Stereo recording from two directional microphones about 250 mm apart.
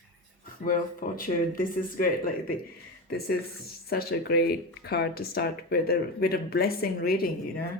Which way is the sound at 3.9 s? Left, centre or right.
Left.